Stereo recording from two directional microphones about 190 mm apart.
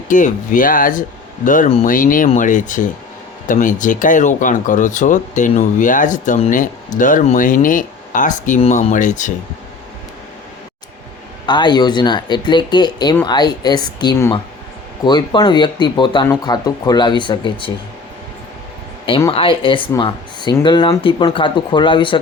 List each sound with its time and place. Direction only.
0.1 s speech: 45° left (ahead or behind)
11.4 s speech: 25° left (ahead or behind)
19.0 s speech: 25° left (ahead or behind)